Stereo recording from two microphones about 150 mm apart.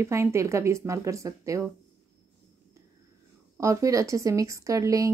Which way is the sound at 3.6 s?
20° right (ahead or behind).